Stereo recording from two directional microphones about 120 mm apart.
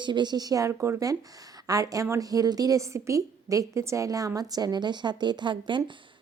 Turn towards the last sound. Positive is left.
turn(degrees=-40)  # may be behind; listen again after turning